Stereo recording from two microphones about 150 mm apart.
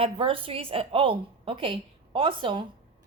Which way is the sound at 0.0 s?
35° right (ahead or behind).